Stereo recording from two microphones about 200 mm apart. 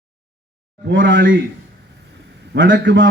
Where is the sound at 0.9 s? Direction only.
65° right (ahead or behind).